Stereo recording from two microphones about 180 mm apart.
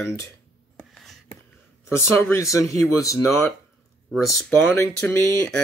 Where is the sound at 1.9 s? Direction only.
15° left (ahead or behind).